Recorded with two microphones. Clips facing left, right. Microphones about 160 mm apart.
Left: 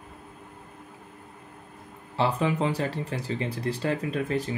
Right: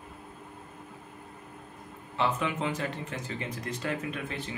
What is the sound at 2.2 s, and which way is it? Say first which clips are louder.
Speech: left 4 dB; 35° left (ahead or behind).